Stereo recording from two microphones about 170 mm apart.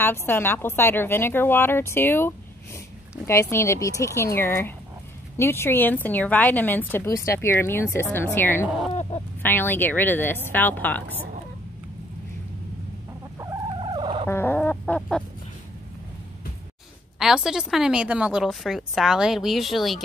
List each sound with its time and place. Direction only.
0.0 s a woman's voice: 15° left (ahead or behind)
8.6 s a woman's voice: 5° right (ahead or behind)
9.4 s a woman's voice: 10° left (ahead or behind)
13.7 s a sound: 30° right (ahead or behind)
14.2 s chicken: 10° left (ahead or behind)
17.2 s a woman's voice: 5° right (ahead or behind)